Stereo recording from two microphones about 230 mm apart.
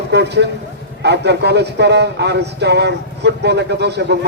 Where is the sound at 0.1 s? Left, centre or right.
Right.